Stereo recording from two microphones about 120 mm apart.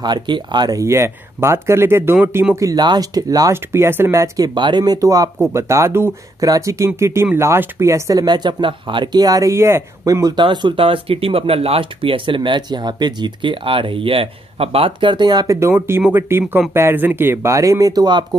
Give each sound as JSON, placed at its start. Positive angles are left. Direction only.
{"t": 0.0, "sound": "speech", "side_deg": -35}
{"t": 2.5, "sound": "speech", "side_deg": -30}
{"t": 4.6, "sound": "speech", "side_deg": -40}
{"t": 10.2, "sound": "speech", "side_deg": -35}
{"t": 15.7, "sound": "speech", "side_deg": -15}